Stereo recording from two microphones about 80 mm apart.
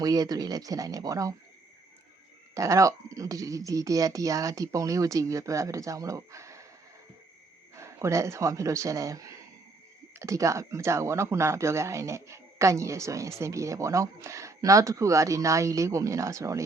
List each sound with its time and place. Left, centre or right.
0.0 s speech: right
2.6 s speech: right
7.8 s speech: right